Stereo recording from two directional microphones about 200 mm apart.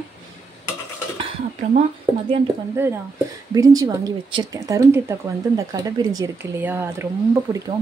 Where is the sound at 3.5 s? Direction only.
15° right (ahead or behind).